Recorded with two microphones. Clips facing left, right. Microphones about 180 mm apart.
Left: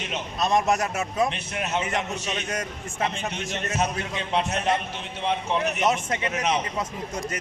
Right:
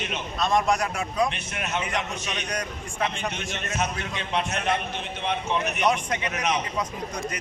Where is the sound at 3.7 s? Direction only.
35° left (ahead or behind).